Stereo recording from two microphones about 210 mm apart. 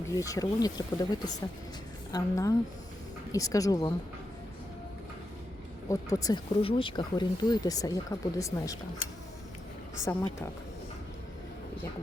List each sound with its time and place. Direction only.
0.1 s speech: 15° left (ahead or behind)
5.9 s speech: 15° left (ahead or behind)
10.0 s speech: 15° left (ahead or behind)